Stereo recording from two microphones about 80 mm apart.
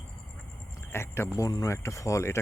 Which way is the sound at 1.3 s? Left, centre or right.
Left.